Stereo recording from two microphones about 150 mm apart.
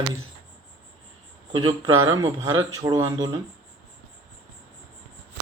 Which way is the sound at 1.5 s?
30° right (ahead or behind).